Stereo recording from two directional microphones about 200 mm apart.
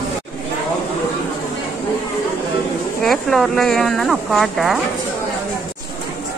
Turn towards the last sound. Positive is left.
turn(degrees=0)  # may be behind; listen again after turning